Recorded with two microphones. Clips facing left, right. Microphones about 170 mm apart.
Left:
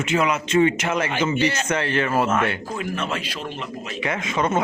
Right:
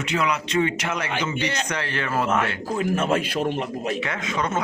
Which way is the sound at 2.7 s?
45° right (ahead or behind).